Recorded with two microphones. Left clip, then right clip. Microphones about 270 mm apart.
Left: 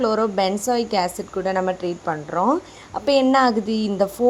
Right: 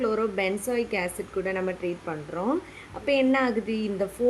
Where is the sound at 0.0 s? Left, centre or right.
Left.